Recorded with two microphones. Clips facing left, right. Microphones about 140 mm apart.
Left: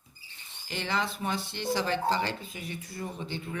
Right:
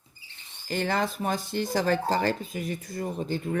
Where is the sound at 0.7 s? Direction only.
45° right (ahead or behind).